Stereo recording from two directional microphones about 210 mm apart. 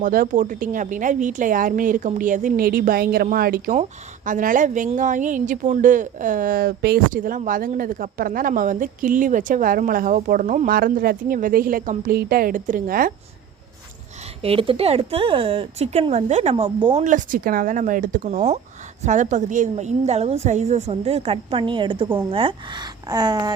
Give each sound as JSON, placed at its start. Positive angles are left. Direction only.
{"t": 0.0, "sound": "a woman's voice", "side_deg": -40}
{"t": 14.4, "sound": "a woman's voice", "side_deg": -25}